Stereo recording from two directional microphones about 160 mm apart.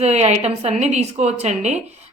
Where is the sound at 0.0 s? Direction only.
45° right (ahead or behind).